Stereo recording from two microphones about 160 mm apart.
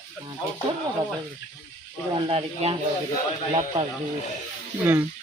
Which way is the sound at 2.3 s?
35° right (ahead or behind).